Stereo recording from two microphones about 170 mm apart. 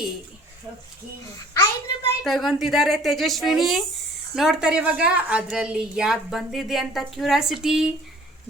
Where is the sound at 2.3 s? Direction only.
Centre (ahead or behind).